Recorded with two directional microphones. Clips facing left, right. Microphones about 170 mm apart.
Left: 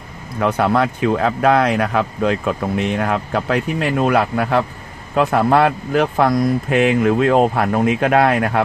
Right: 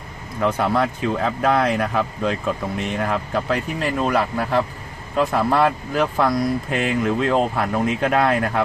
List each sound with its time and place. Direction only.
0.4 s speech: 65° left (ahead or behind)